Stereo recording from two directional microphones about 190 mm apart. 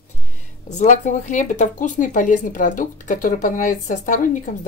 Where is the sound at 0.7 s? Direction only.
40° left (ahead or behind).